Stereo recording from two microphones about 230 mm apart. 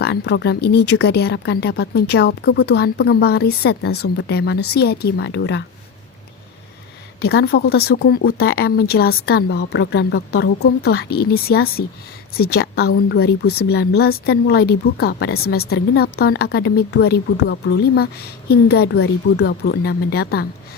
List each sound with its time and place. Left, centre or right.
0.0 s speech: left
7.2 s speech: left